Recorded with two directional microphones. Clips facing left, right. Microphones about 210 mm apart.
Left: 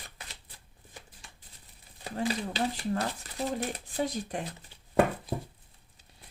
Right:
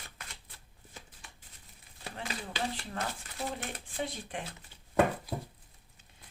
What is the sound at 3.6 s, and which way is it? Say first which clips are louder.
Speech: left 6 dB; 40° left (ahead or behind).